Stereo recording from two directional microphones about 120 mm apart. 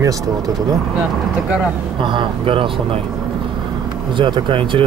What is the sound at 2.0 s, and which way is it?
Speech, 45° right (ahead or behind).